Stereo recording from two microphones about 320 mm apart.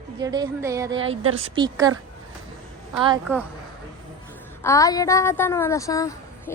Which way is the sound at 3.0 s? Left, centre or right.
Centre.